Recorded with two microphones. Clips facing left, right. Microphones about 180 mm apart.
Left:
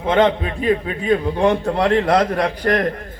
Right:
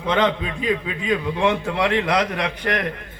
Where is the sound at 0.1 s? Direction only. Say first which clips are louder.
Left 4 dB; 50° left (ahead or behind).